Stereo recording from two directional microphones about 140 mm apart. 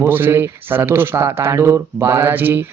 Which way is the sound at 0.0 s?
15° right (ahead or behind).